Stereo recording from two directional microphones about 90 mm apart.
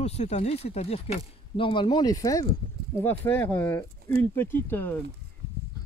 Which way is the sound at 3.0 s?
20° left (ahead or behind).